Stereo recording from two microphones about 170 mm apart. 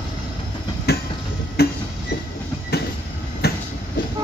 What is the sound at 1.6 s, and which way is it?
Tick-tock, 70° left (ahead or behind).